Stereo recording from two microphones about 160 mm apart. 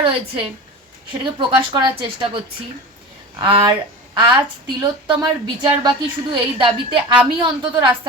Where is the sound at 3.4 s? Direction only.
30° right (ahead or behind).